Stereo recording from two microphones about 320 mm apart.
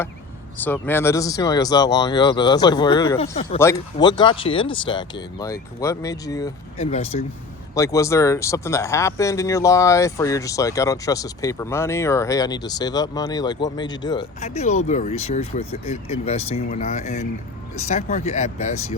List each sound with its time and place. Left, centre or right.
0.6 s speech: centre; by 18.4 s left